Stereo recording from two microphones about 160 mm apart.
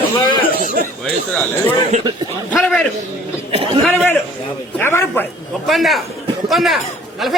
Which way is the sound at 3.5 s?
35° right (ahead or behind).